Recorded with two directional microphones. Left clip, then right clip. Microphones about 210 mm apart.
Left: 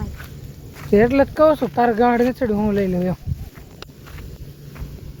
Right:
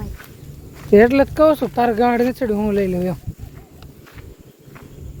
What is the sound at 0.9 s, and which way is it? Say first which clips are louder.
Speech: right 4 dB; 40° right (ahead or behind).